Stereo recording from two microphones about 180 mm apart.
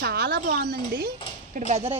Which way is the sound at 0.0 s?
60° right (ahead or behind).